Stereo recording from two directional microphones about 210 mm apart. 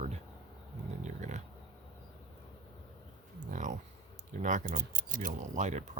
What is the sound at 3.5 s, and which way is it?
Speech, 35° right (ahead or behind).